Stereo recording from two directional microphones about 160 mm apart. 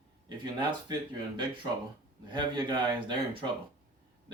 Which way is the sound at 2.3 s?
30° right (ahead or behind).